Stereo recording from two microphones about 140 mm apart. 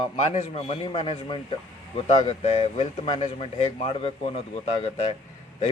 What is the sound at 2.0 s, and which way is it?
Speech, 50° left (ahead or behind).